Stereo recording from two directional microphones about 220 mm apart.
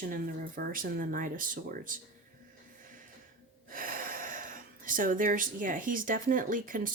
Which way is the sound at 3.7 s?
40° right (ahead or behind).